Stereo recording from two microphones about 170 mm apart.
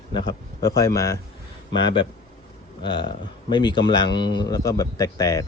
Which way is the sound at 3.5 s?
25° left (ahead or behind).